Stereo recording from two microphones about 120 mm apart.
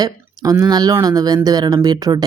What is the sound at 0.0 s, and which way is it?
A woman's voice, 30° right (ahead or behind).